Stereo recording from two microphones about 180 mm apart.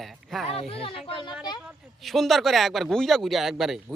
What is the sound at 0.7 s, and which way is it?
Speech, 30° left (ahead or behind).